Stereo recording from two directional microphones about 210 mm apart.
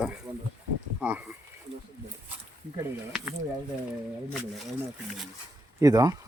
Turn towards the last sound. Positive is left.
turn(degrees=-15)  # may be behind; listen again after turning